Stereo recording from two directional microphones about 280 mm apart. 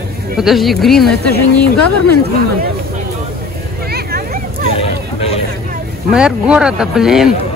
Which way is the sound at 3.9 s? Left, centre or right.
Right.